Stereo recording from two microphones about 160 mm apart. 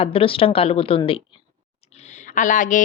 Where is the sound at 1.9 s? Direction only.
45° left (ahead or behind).